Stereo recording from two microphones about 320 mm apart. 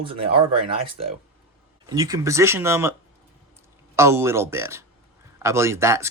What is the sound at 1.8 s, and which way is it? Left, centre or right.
Speech, centre.